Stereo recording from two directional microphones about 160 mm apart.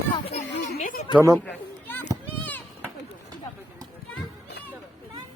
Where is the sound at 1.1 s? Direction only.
20° right (ahead or behind).